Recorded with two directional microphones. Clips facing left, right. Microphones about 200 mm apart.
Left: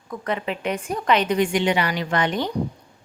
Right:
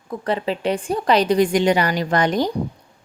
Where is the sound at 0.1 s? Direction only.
30° right (ahead or behind).